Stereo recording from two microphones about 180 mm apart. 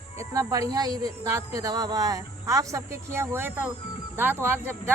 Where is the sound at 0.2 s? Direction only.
20° right (ahead or behind).